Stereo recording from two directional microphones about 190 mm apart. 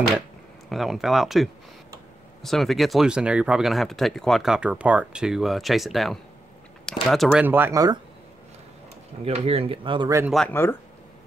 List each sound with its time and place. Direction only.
0.7 s speech: centre (ahead or behind); by 8.0 s 20° right (ahead or behind)
9.2 s speech: 30° right (ahead or behind); by 10.3 s 15° right (ahead or behind)
10.3 s speech: 10° left (ahead or behind)